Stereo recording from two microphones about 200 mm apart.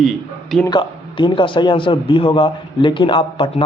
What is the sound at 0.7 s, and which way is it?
Speech, 25° left (ahead or behind).